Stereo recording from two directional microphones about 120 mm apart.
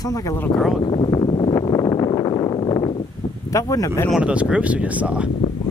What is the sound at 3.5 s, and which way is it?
Speech, 30° left (ahead or behind).